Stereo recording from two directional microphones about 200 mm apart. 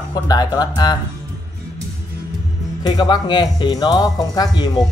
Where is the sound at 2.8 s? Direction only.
20° left (ahead or behind).